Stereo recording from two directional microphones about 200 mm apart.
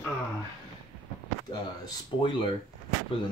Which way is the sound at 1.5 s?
20° left (ahead or behind).